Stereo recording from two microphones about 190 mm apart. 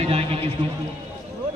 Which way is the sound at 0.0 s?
30° right (ahead or behind).